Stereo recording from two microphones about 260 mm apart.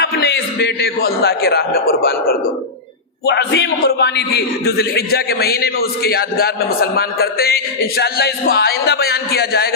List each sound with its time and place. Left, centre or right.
0.0 s a man's voice: left